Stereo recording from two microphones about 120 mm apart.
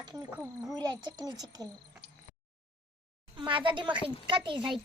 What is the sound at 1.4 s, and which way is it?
Speech, 30° right (ahead or behind).